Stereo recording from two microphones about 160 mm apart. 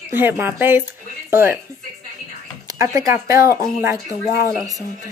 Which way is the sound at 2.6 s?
20° right (ahead or behind).